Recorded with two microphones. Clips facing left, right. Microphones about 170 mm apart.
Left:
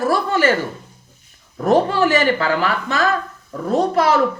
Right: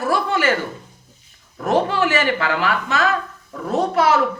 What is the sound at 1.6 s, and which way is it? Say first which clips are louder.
Speech: left 3 dB; 35° left (ahead or behind).